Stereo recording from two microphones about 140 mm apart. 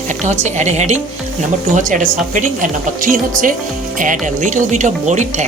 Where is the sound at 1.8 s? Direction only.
65° right (ahead or behind).